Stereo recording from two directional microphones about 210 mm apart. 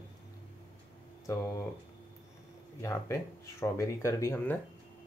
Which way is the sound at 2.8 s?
15° left (ahead or behind).